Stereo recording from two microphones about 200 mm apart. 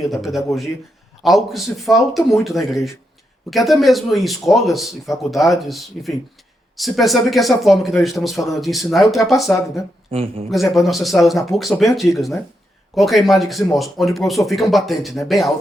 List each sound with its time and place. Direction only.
0.0 s speech: centre (ahead or behind)
10.1 s speech: 30° right (ahead or behind)
10.5 s speech: centre (ahead or behind)